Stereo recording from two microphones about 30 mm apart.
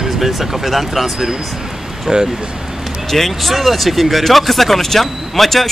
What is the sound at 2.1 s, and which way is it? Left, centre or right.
Speech, right.